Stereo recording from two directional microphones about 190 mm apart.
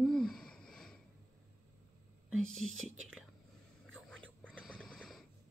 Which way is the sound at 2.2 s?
90° right.